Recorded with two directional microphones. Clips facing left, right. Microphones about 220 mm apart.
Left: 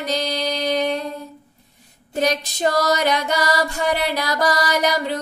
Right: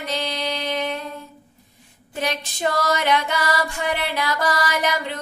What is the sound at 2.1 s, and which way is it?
Child singing, 40° left (ahead or behind).